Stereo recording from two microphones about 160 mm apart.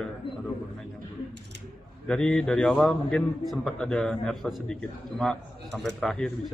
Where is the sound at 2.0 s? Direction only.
5° left (ahead or behind).